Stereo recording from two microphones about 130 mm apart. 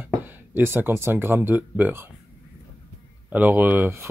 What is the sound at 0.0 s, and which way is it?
Speech, 15° right (ahead or behind).